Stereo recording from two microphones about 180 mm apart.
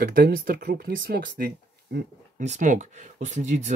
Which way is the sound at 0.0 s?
55° right (ahead or behind).